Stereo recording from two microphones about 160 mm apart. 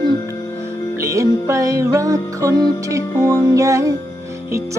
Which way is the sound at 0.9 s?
20° right (ahead or behind).